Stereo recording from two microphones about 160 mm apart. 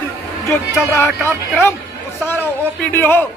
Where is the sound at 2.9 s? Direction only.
15° left (ahead or behind).